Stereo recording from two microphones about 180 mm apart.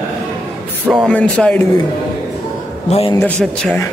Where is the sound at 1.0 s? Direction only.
5° left (ahead or behind).